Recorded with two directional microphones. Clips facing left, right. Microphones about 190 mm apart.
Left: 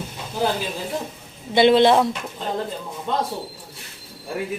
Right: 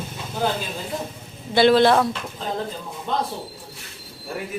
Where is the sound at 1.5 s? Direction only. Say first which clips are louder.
Left 1 dB; 20° left (ahead or behind).